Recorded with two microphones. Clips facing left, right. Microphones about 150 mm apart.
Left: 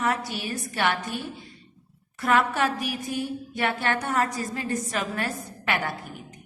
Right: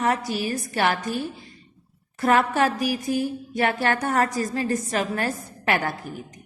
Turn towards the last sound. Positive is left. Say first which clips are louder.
# right 4 dB
turn(degrees=-40)  # may be behind; listen again after turning